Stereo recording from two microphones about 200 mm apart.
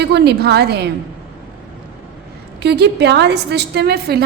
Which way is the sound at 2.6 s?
55° right (ahead or behind).